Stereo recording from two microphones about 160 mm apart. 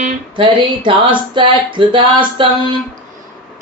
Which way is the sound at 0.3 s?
30° right (ahead or behind).